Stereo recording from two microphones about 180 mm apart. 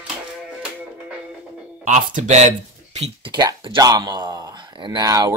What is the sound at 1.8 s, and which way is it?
Speech, 45° right (ahead or behind).